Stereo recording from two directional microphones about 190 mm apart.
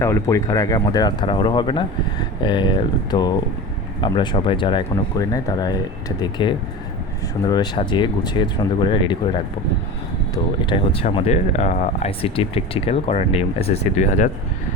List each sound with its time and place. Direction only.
0.0 s speech: 15° left (ahead or behind); by 14.3 s 40° left (ahead or behind)